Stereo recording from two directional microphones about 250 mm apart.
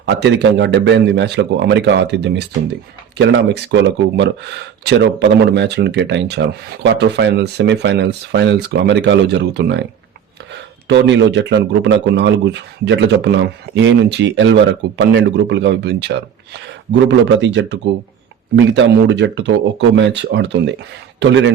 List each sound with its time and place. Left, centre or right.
0.0 s speech: right
10.8 s speech: right